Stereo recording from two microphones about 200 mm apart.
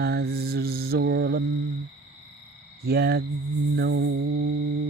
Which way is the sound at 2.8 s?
50° right (ahead or behind).